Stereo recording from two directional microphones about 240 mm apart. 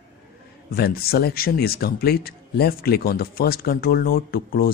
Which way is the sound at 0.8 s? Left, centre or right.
Left.